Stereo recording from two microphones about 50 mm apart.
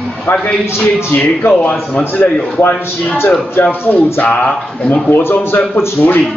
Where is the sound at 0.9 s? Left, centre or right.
Left.